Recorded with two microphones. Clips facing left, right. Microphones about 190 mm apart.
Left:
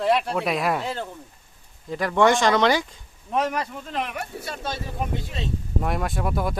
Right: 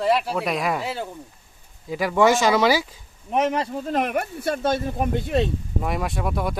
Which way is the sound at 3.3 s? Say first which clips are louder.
Right 3 dB; 20° right (ahead or behind).